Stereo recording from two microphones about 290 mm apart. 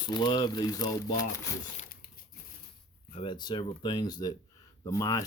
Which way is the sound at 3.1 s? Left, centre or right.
Centre.